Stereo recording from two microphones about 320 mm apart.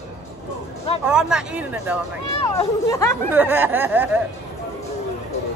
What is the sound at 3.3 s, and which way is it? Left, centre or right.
Speech, centre.